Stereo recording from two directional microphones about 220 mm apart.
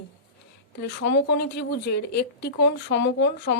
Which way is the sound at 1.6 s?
50° left (ahead or behind).